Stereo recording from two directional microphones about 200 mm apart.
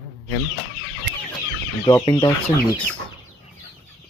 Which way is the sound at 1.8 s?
20° left (ahead or behind).